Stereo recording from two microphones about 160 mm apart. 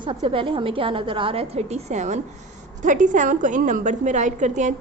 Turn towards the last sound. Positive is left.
turn(degrees=-50)  # may be behind; listen again after turning